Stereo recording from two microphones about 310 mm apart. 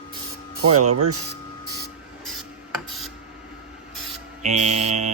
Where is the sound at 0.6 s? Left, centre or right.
Right.